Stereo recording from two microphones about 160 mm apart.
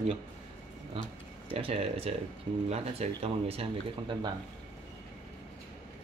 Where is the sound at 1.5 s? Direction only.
35° right (ahead or behind).